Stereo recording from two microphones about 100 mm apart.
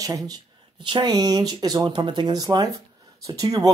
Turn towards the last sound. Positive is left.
turn(degrees=-40)  # may be behind; listen again after turning